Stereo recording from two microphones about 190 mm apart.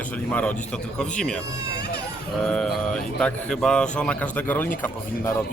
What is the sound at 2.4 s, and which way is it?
Speech, 5° left (ahead or behind).